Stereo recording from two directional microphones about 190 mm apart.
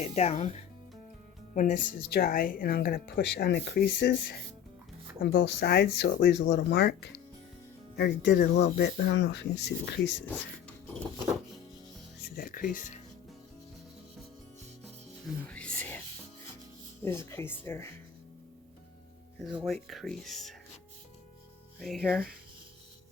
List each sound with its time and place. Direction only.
0.0 s speech: 35° left (ahead or behind); by 10.2 s 65° left (ahead or behind)
12.4 s speech: 50° left (ahead or behind)
15.4 s a sound: 5° left (ahead or behind)
17.0 s speech: 10° left (ahead or behind)
19.5 s speech: centre (ahead or behind)
21.8 s speech: centre (ahead or behind)